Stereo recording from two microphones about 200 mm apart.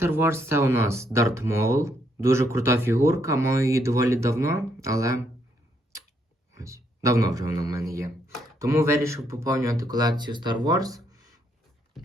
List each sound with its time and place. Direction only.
0.0 s speech: 10° right (ahead or behind)
6.5 s a sound: 15° right (ahead or behind)
7.0 s speech: 15° right (ahead or behind)